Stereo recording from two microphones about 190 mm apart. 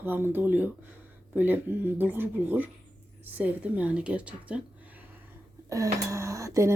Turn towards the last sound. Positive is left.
turn(degrees=-15)  # may be behind; listen again after turning